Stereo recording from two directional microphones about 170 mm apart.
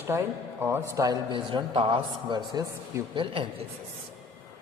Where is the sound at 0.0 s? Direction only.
15° right (ahead or behind).